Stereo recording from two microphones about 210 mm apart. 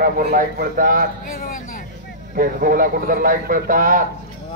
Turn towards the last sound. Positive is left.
turn(degrees=-40)  # may be behind; listen again after turning